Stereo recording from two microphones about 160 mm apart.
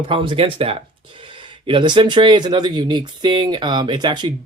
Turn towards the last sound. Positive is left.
turn(degrees=-30)  # may be behind; listen again after turning